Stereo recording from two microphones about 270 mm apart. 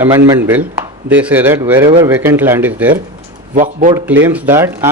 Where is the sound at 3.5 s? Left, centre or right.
Right.